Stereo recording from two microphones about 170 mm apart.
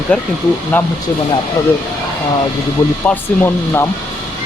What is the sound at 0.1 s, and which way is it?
Speech, 5° left (ahead or behind).